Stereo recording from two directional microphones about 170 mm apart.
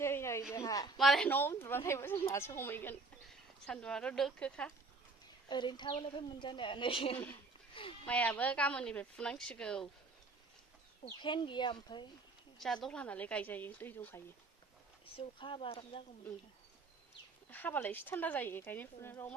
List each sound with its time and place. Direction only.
0.0 s a sound: 15° left (ahead or behind)
0.9 s speech: centre (ahead or behind)
1.3 s a woman's voice: 15° left (ahead or behind)
5.5 s a woman's voice: 25° left (ahead or behind)
8.0 s a woman's voice: 5° left (ahead or behind)
11.0 s a woman's voice: 30° left (ahead or behind)
12.5 s a woman's voice: centre (ahead or behind)
15.1 s speech: 30° left (ahead or behind)
17.5 s a woman's voice: 10° left (ahead or behind)